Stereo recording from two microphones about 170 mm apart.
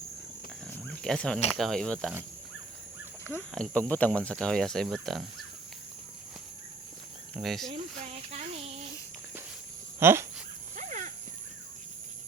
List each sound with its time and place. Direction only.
0.7 s wild animals: 5° left (ahead or behind)
1.5 s speech: centre (ahead or behind)
3.5 s speech: 5° left (ahead or behind)
7.3 s speech: centre (ahead or behind)
8.3 s child singing: 35° right (ahead or behind)
10.0 s speech: 15° right (ahead or behind)
10.8 s dog: 50° right (ahead or behind)